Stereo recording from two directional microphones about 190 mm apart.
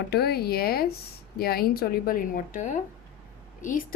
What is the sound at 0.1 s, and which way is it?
Speech, 55° left (ahead or behind).